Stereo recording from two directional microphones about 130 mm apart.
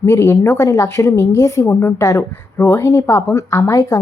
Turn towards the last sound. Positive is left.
turn(degrees=25)  # may be behind; listen again after turning